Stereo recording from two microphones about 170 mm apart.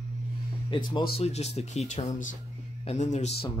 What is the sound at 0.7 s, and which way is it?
Speech, 25° left (ahead or behind).